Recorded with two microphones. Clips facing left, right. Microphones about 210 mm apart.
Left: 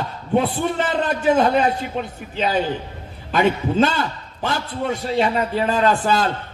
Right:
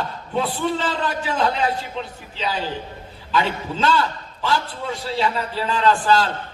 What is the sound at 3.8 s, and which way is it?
A man's voice, 50° left (ahead or behind).